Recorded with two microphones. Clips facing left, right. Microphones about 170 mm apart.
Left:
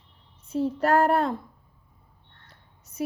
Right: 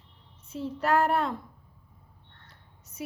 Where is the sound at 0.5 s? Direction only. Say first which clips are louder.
Left 4 dB; 45° left (ahead or behind).